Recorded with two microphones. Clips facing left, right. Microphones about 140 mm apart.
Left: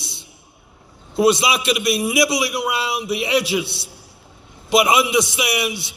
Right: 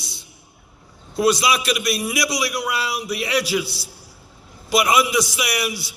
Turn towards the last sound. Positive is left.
turn(degrees=25)  # may be behind; listen again after turning